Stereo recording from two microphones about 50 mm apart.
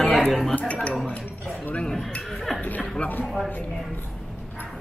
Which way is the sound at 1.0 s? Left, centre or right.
Left.